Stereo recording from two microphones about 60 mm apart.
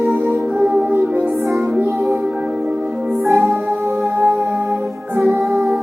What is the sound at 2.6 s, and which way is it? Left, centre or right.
Music, right.